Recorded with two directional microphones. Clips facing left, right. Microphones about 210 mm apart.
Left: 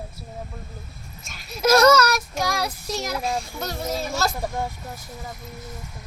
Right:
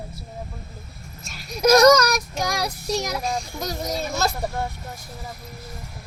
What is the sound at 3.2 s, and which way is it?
Speech, 5° left (ahead or behind).